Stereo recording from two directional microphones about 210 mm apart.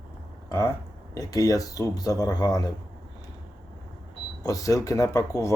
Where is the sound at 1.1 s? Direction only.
15° left (ahead or behind).